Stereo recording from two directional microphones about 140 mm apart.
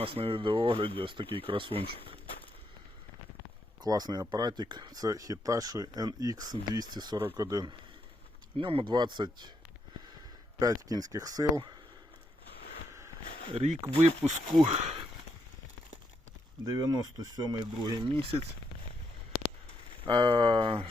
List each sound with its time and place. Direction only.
0.0 s speech: 40° right (ahead or behind)
3.8 s speech: 30° right (ahead or behind)
10.6 s speech: 25° right (ahead or behind)
12.9 s a sound: 20° right (ahead or behind)
13.2 s a sound: 90° left
13.5 s speech: 45° right (ahead or behind)
16.7 s speech: 25° right (ahead or behind); by 18.4 s 45° right (ahead or behind)
20.1 s speech: 30° right (ahead or behind)